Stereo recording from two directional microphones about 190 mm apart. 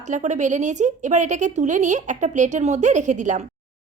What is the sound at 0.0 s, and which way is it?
Speech, 40° right (ahead or behind).